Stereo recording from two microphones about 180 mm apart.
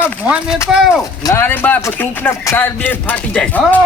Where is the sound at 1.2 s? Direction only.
15° left (ahead or behind).